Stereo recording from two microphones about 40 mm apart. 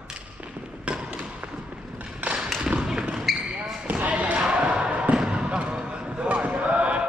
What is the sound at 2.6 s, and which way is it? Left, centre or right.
Thump, centre.